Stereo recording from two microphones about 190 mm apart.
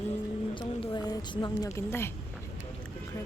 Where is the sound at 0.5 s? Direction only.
20° left (ahead or behind).